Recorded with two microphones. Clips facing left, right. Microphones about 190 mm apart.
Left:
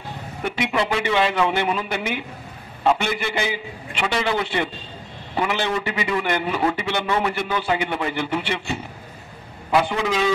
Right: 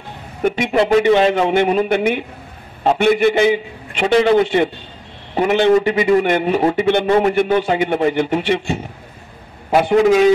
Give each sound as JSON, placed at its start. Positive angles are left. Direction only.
{"t": 0.4, "sound": "a man's voice", "side_deg": -45}